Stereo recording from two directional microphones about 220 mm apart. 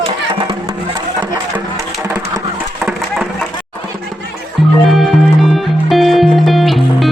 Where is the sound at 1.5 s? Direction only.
15° right (ahead or behind).